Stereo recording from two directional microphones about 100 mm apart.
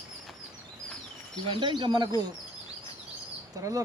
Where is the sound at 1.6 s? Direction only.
50° right (ahead or behind).